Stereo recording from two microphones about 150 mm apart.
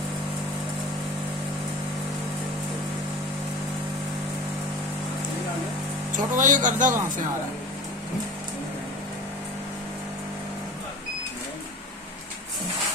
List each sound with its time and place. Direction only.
6.3 s speech: 60° right (ahead or behind)